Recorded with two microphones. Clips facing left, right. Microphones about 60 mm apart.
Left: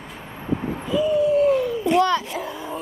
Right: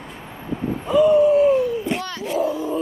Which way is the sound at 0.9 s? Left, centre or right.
Right.